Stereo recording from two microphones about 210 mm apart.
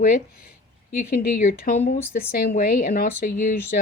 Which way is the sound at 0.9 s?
40° left (ahead or behind).